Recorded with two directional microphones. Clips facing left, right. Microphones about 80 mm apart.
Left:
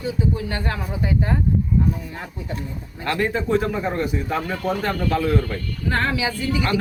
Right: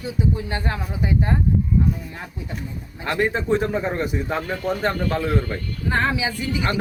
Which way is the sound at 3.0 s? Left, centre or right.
Right.